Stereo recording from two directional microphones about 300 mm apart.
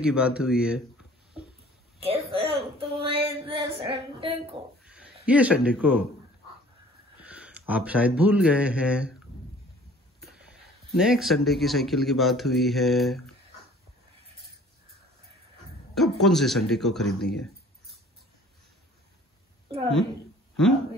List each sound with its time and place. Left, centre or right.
0.0 s speech: centre
2.0 s speech: centre
5.2 s speech: centre
7.2 s speech: centre
10.2 s speech: centre
15.9 s speech: centre